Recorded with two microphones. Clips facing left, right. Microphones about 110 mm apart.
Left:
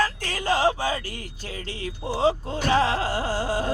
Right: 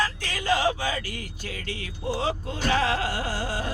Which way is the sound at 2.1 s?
30° left (ahead or behind).